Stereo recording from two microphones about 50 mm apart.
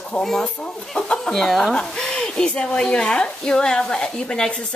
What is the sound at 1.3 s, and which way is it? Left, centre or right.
Speech, centre.